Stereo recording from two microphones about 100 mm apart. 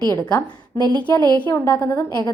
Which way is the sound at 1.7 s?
15° left (ahead or behind).